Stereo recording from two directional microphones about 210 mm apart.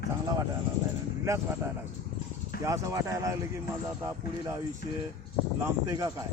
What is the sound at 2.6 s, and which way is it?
Speech, 15° right (ahead or behind).